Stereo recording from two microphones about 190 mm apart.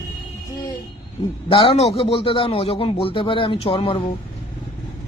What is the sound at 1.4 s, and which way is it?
A man's voice, 30° left (ahead or behind).